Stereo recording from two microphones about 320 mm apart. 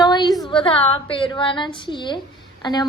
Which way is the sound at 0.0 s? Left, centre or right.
Centre.